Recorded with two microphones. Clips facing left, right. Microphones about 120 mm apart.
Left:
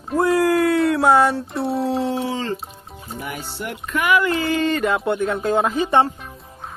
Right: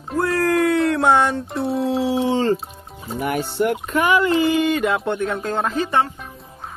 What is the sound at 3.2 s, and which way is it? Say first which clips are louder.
Speech: right 11 dB; 55° right (ahead or behind).